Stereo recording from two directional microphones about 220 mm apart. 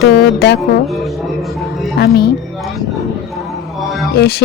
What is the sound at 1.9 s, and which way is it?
Speech, 45° left (ahead or behind).